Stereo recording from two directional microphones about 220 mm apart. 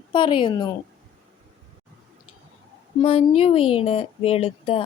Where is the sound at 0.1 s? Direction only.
20° left (ahead or behind).